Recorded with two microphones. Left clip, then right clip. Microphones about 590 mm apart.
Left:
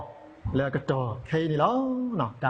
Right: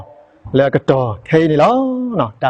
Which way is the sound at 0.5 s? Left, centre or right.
Right.